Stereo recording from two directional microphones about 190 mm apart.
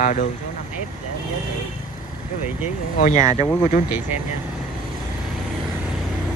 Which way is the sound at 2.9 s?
40° left (ahead or behind).